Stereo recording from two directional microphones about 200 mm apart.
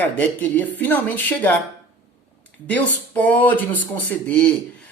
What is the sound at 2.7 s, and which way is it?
Speech, 10° left (ahead or behind).